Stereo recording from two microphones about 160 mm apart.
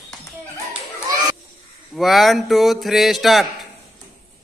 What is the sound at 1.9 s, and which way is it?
Speech, centre (ahead or behind).